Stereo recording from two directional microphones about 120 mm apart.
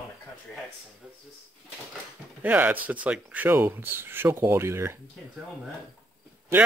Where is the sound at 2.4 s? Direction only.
15° right (ahead or behind).